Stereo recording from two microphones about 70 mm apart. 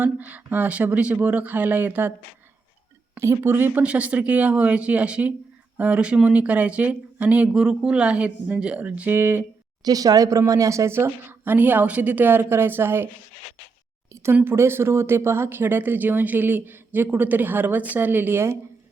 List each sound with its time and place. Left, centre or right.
0.0 s speech: right
3.2 s speech: right
9.1 s a woman's voice: right
9.8 s a woman's voice: right
14.1 s a sound: right
14.4 s speech: right